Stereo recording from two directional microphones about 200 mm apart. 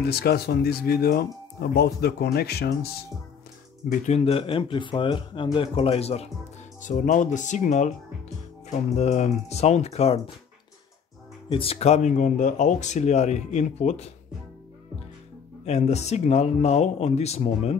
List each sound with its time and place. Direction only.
0.0 s speech: 50° left (ahead or behind)
4.0 s speech: 30° left (ahead or behind)
11.4 s speech: 30° left (ahead or behind)
15.6 s speech: 35° left (ahead or behind)